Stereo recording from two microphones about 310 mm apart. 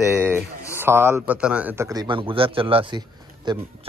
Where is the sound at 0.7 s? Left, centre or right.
Centre.